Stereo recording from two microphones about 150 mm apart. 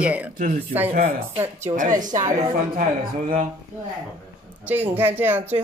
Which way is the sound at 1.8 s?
60° right (ahead or behind).